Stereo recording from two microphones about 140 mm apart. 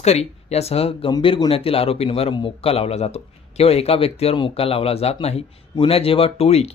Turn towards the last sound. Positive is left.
turn(degrees=50)  # may be behind; listen again after turning